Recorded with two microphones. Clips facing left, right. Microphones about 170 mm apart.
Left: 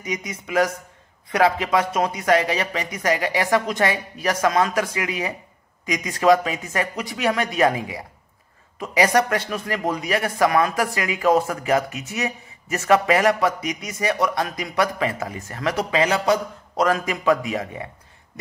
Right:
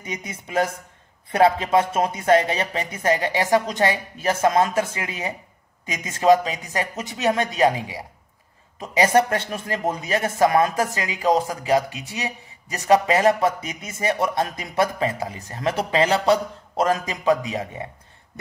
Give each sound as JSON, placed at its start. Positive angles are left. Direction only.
{"t": 0.0, "sound": "a man's voice", "side_deg": -30}